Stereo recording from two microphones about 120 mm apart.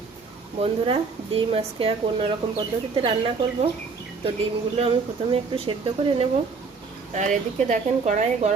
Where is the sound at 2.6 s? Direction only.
40° right (ahead or behind).